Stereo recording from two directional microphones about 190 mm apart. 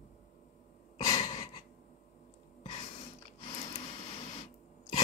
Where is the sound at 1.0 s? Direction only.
20° left (ahead or behind).